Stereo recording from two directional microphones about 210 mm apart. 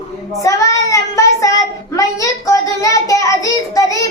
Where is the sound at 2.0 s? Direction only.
15° left (ahead or behind).